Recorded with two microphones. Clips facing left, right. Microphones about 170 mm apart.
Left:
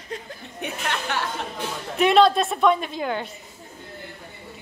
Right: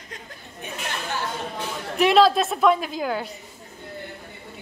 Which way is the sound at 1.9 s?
Centre (ahead or behind).